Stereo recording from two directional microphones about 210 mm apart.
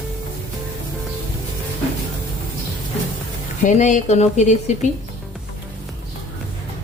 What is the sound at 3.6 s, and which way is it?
Speech, 35° left (ahead or behind).